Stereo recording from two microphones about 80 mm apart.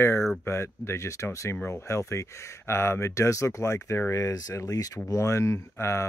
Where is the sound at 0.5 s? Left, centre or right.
Left.